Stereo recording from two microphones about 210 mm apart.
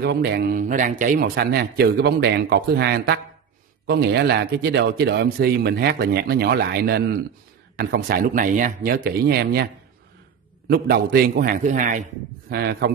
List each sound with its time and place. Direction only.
0.0 s speech: 50° right (ahead or behind)
10.7 s speech: 50° right (ahead or behind)
12.4 s speech: 50° right (ahead or behind)